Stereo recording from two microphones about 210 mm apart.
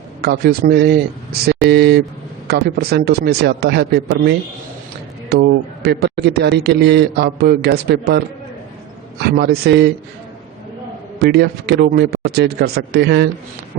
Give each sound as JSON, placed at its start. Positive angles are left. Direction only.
{"t": 0.2, "sound": "a man's voice", "side_deg": -45}
{"t": 9.2, "sound": "a man's voice", "side_deg": -55}
{"t": 11.2, "sound": "a man's voice", "side_deg": -50}